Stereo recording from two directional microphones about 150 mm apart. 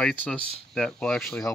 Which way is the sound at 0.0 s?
5° left (ahead or behind).